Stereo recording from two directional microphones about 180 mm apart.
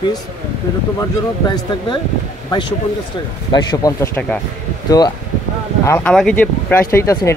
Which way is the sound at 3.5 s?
20° left (ahead or behind).